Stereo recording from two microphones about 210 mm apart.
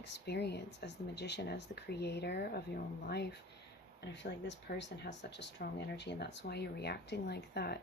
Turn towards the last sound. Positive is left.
turn(degrees=50)  # may be behind; listen again after turning